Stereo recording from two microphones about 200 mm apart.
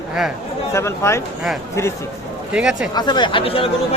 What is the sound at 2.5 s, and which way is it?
Speech, 5° right (ahead or behind).